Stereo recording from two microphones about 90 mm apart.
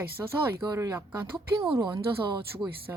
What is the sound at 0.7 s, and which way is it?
Speech, 35° right (ahead or behind).